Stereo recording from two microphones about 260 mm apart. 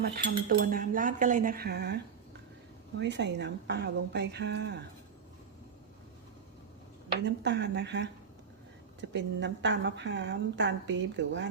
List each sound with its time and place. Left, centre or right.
0.0 s a woman's voice: right
3.0 s a woman's voice: right
7.3 s a woman's voice: right